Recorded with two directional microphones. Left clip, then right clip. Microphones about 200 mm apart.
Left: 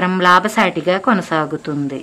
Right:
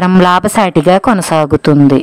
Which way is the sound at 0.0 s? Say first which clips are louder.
Right 3 dB; 50° right (ahead or behind).